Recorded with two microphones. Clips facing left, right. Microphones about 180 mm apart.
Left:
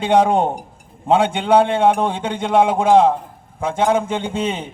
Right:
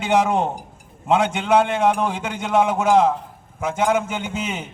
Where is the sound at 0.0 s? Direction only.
30° left (ahead or behind).